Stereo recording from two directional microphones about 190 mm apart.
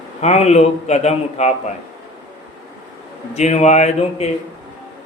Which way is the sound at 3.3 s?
35° left (ahead or behind).